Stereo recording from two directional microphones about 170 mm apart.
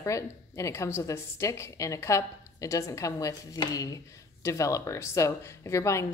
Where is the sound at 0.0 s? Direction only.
15° left (ahead or behind).